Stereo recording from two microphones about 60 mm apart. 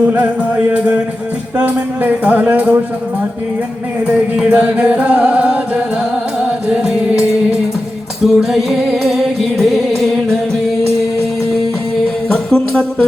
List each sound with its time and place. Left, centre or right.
0.0 s music: right
4.4 s music: centre
12.3 s music: centre